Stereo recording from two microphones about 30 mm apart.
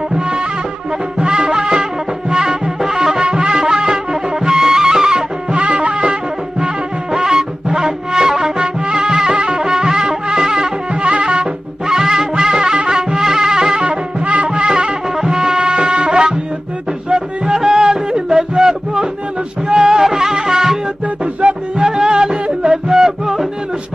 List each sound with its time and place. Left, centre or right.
0.1 s music: right
3.3 s music: right
5.5 s music: right
6.6 s music: centre
11.0 s music: right
11.9 s music: centre
13.8 s music: right
15.1 s music: centre
15.6 s music: right
17.6 s music: right